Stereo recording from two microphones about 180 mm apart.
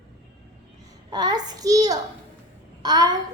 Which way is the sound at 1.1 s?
20° right (ahead or behind).